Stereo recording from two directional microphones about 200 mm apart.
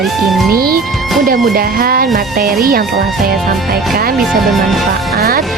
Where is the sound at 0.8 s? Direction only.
Centre (ahead or behind).